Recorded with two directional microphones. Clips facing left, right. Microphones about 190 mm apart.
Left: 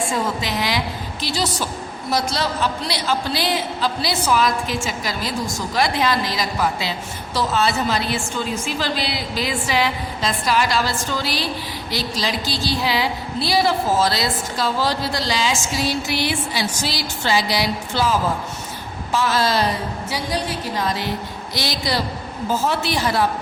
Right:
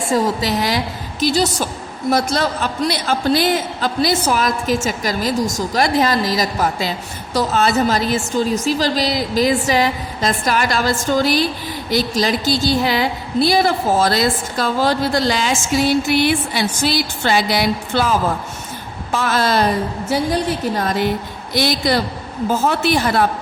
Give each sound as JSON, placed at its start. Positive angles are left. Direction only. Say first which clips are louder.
{"t": 0.1, "sound": "a woman's voice", "louder": "right 6 dB", "side_deg": -40}